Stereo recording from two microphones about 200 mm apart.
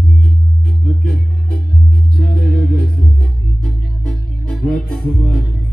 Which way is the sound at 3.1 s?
5° left (ahead or behind).